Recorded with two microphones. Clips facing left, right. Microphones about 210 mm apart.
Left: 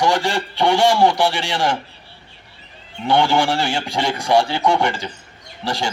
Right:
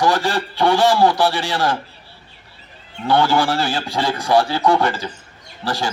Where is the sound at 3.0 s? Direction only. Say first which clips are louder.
Even; 20° left (ahead or behind).